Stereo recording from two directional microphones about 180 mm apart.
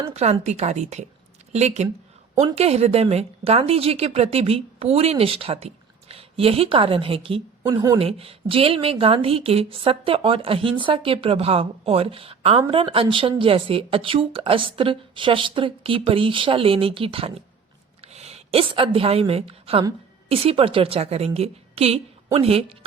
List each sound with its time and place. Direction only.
0.0 s a woman's voice: 35° right (ahead or behind)
8.0 s a woman's voice: 30° right (ahead or behind)